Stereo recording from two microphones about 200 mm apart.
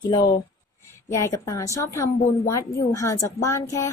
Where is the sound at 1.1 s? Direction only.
15° left (ahead or behind).